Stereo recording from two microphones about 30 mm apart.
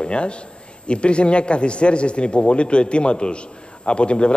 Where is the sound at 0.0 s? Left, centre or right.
Left.